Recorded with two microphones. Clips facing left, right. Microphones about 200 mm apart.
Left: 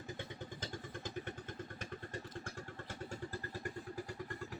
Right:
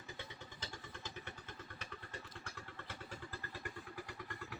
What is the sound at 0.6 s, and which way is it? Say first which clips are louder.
Vehicle: left 4 dB; 50° left (ahead or behind).